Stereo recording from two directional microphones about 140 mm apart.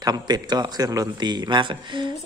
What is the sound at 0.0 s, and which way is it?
A man's voice, 30° right (ahead or behind).